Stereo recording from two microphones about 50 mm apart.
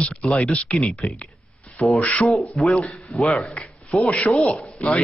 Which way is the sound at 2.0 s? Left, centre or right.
Left.